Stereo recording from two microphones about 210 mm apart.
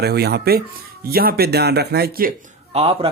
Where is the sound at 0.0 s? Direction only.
50° right (ahead or behind).